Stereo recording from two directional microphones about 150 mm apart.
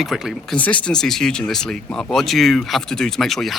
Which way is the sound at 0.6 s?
10° left (ahead or behind).